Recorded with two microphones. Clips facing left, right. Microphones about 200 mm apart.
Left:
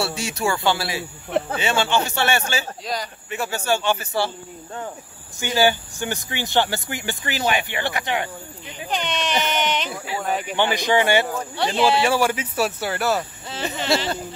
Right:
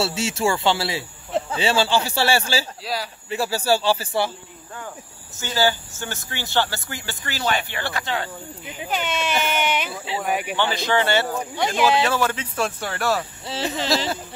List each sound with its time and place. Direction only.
0.0 s speech: 25° right (ahead or behind)
2.8 s speech: 5° right (ahead or behind)
3.3 s speech: 35° right (ahead or behind)
5.4 s speech: 15° left (ahead or behind)
8.6 s speech: 5° right (ahead or behind)
10.5 s speech: 15° left (ahead or behind)
11.3 s speech: 15° right (ahead or behind)
11.8 s speech: 10° left (ahead or behind)